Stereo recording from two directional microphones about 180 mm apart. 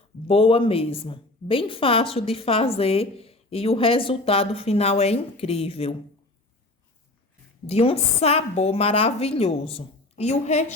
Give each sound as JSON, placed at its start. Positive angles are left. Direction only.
{"t": 0.3, "sound": "a woman's voice", "side_deg": 30}
{"t": 7.7, "sound": "a woman's voice", "side_deg": 35}